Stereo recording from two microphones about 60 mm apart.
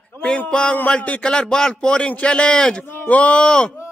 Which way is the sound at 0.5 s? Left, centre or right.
Centre.